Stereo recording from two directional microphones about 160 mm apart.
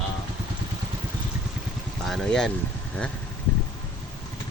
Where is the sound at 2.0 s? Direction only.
Centre (ahead or behind).